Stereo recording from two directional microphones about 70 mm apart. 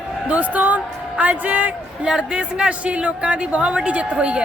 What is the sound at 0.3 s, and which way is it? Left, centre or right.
A woman's voice, right.